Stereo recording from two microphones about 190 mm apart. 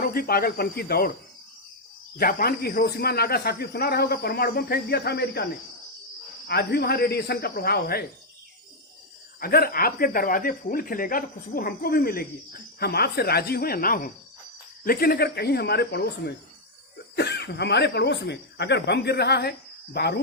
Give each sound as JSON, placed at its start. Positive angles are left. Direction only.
{"t": 0.0, "sound": "speech", "side_deg": 50}
{"t": 2.1, "sound": "a man's voice", "side_deg": 50}
{"t": 6.5, "sound": "a man's voice", "side_deg": 55}
{"t": 9.4, "sound": "a man's voice", "side_deg": 50}